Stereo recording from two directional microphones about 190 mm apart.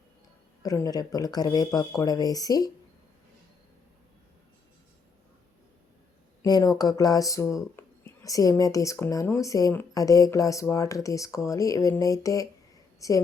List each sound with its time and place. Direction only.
0.6 s speech: 20° left (ahead or behind)
6.4 s a woman's voice: 20° left (ahead or behind)